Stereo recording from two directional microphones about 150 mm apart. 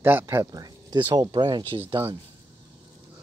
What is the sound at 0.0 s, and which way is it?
Speech, 15° right (ahead or behind).